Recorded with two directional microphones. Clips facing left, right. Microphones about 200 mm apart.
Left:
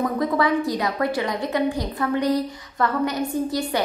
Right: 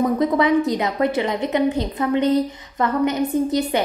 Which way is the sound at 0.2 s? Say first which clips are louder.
Right 4 dB; 20° right (ahead or behind).